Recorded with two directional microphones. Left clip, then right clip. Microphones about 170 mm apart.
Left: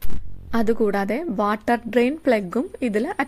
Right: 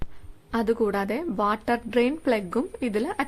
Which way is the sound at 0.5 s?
25° left (ahead or behind).